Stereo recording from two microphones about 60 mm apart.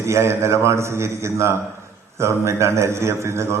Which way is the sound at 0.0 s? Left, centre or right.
Right.